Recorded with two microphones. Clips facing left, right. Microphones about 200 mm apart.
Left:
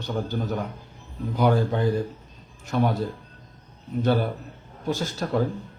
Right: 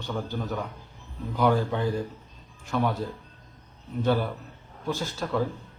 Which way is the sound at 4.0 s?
35° left (ahead or behind).